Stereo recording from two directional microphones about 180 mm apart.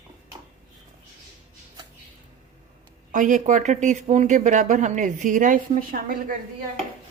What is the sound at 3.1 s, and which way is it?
Speech, 45° right (ahead or behind).